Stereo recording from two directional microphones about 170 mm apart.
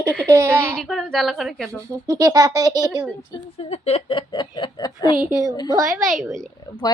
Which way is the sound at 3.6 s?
35° left (ahead or behind).